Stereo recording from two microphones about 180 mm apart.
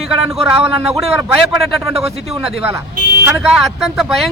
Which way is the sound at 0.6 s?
30° right (ahead or behind).